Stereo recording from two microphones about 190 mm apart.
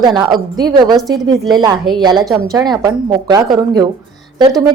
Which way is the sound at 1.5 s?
20° right (ahead or behind).